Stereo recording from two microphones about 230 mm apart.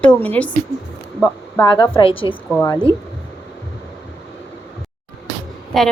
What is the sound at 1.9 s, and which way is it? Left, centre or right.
A woman's voice, left.